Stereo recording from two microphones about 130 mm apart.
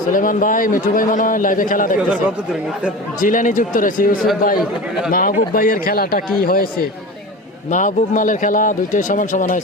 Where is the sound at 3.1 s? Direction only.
90° left.